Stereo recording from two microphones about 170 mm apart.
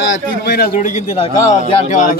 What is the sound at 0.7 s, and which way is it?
A man's voice, 45° left (ahead or behind).